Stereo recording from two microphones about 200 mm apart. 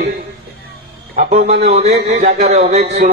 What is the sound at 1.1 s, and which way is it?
A man's voice, 40° right (ahead or behind).